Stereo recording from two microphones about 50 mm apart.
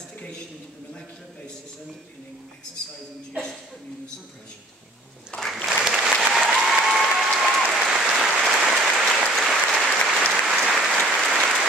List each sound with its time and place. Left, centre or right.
5.3 s applause: left
5.7 s applause: centre
9.3 s applause: centre